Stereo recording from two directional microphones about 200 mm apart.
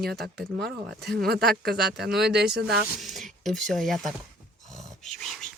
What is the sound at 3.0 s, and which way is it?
Speech, centre (ahead or behind).